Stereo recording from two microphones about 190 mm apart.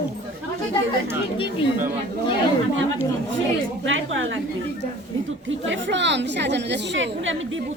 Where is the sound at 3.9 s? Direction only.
90° right.